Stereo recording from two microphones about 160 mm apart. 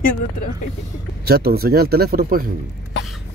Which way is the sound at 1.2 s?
75° right (ahead or behind).